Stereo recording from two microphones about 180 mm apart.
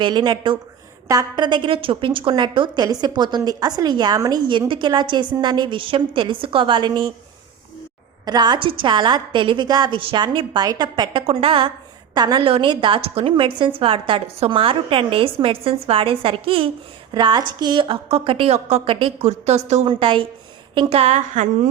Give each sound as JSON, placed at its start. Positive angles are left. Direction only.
{"t": 0.0, "sound": "a woman's voice", "side_deg": -25}
{"t": 8.2, "sound": "a woman's voice", "side_deg": -25}